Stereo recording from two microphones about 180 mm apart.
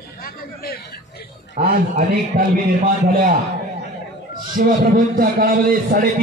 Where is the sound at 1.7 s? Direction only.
50° right (ahead or behind).